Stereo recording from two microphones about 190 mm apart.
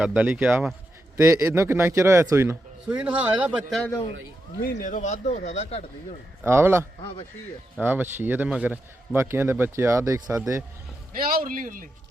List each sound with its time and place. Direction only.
0.0 s a man's voice: 5° right (ahead or behind)
4.6 s speech: 45° left (ahead or behind)
6.4 s a man's voice: 15° right (ahead or behind)
11.1 s a man's voice: 50° right (ahead or behind)